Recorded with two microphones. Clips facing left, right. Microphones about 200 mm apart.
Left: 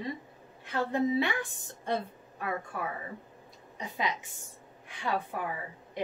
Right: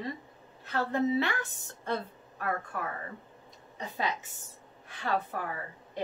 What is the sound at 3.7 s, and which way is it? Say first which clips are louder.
Speech: even; 15° left (ahead or behind).